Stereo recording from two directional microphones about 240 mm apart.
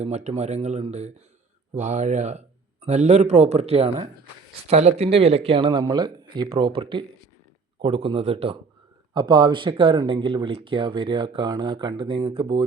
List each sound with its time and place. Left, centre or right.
0.0 s speech: right